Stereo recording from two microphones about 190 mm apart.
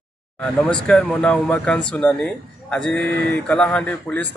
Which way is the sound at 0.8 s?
5° left (ahead or behind).